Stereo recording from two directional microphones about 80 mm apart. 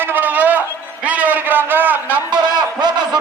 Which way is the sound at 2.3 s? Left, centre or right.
Right.